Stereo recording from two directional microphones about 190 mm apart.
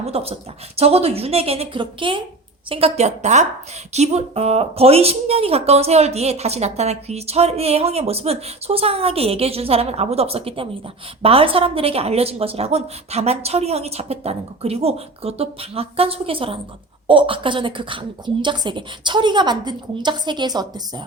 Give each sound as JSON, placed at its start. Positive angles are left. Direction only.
{"t": 0.0, "sound": "a woman's voice", "side_deg": -30}